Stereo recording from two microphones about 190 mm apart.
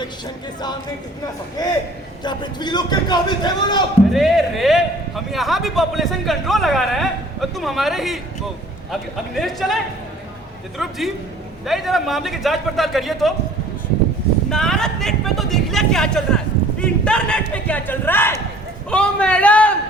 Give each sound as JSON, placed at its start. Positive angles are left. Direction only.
{"t": 1.5, "sound": "a man's voice", "side_deg": 20}
{"t": 4.1, "sound": "a man's voice", "side_deg": 0}
{"t": 10.8, "sound": "a man's voice", "side_deg": 0}
{"t": 14.5, "sound": "a man's voice", "side_deg": 5}